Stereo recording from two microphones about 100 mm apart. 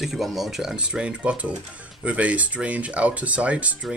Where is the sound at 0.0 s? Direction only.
Centre (ahead or behind).